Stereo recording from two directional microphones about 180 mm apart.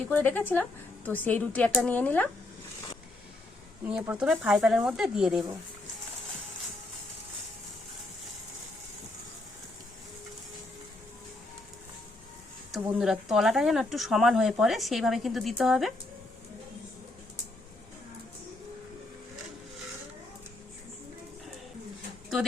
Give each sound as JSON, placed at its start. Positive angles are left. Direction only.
{"t": 0.1, "sound": "a woman's voice", "side_deg": 10}
{"t": 3.8, "sound": "speech", "side_deg": -5}
{"t": 13.0, "sound": "speech", "side_deg": 0}